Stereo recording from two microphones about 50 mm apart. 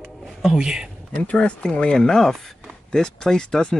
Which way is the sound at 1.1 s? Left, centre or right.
Left.